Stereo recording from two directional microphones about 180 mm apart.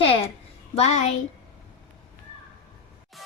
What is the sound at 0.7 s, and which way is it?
Speech, 40° left (ahead or behind).